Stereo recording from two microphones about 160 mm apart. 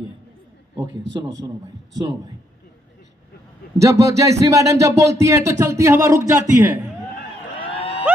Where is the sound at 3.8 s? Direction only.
20° right (ahead or behind).